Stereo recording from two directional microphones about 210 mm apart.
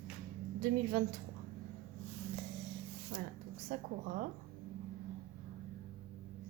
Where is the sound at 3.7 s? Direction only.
45° right (ahead or behind).